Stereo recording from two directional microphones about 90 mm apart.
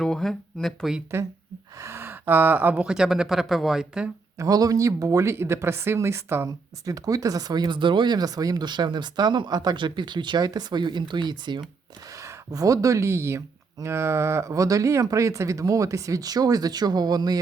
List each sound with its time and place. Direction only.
0.0 s speech: 5° left (ahead or behind)
1.1 s speech: 30° right (ahead or behind)
2.8 s speech: 5° right (ahead or behind)
4.4 s speech: 45° right (ahead or behind)
6.8 s speech: 40° right (ahead or behind); by 11.6 s 55° right (ahead or behind)
12.2 s speech: 40° right (ahead or behind)